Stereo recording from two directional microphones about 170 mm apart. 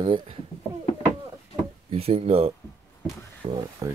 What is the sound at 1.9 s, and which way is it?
Speech, 35° right (ahead or behind).